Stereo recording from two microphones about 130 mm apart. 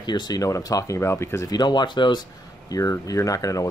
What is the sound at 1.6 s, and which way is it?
A man's voice, 35° left (ahead or behind).